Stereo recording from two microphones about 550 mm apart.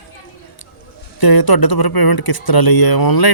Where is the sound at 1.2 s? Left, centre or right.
Left.